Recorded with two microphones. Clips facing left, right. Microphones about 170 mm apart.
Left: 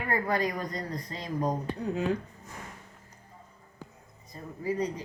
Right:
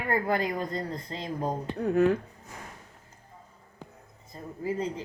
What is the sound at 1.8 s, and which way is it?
Speech, 55° right (ahead or behind).